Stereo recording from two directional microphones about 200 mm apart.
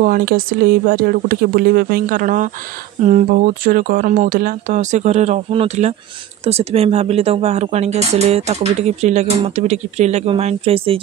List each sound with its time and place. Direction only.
0.0 s speech: 45° right (ahead or behind); by 11.0 s 30° right (ahead or behind)